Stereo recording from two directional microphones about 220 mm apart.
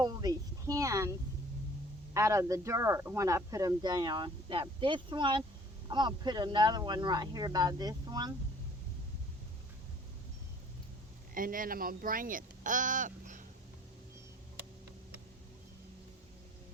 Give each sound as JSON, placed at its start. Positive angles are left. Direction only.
{"t": 0.0, "sound": "a sound", "side_deg": -20}
{"t": 2.1, "sound": "speech", "side_deg": -15}
{"t": 11.3, "sound": "speech", "side_deg": -40}